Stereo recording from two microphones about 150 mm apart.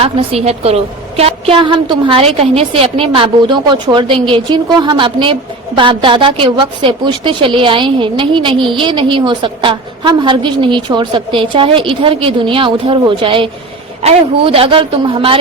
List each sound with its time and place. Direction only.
0.0 s a woman's voice: 40° right (ahead or behind)